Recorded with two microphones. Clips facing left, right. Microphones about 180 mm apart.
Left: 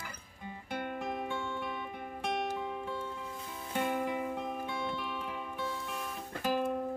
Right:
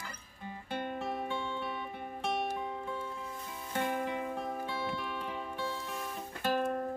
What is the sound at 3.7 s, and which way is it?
Music, 15° left (ahead or behind).